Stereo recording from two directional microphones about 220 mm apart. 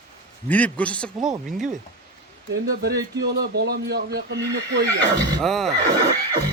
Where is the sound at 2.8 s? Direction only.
45° right (ahead or behind).